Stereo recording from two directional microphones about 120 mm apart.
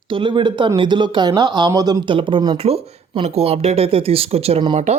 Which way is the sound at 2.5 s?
55° right (ahead or behind).